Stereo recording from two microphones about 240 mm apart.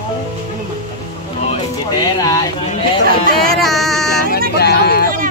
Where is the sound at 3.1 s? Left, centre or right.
Right.